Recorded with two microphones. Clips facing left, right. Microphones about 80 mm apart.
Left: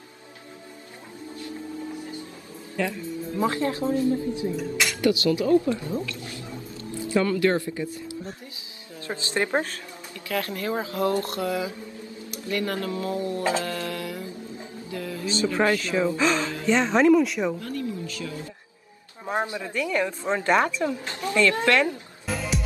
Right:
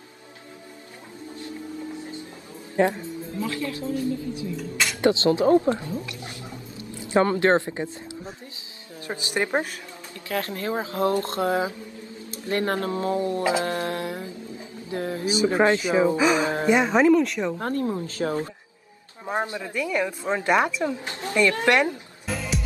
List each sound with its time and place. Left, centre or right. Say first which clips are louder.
2.0 s music: even; right
2.7 s speech: right 6 dB; right
3.3 s speech: left 5 dB; left
5.0 s speech: right 3 dB; right
6.8 s music: right 3 dB; right
7.2 s a woman's voice: right 2 dB; right; by 9.8 s centre
10.2 s speech: even; right
13.4 s a woman's voice: right 2 dB; centre
13.7 s a sound: right 3 dB; right
15.4 s a woman's voice: right 3 dB; right; by 17.6 s centre
17.6 s speech: right 5 dB; right
19.6 s a woman's voice: even; centre
21.1 s a woman's voice: even; right
22.2 s music: even; centre